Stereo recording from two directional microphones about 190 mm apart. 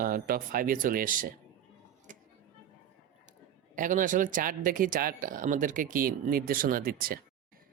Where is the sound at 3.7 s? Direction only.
45° right (ahead or behind).